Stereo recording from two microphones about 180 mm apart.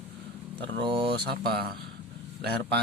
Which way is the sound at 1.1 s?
60° right (ahead or behind).